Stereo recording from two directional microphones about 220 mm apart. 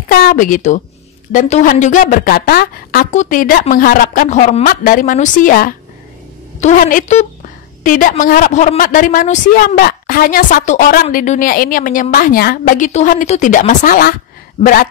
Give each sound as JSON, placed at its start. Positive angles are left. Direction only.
{"t": 0.1, "sound": "a woman's voice", "side_deg": 40}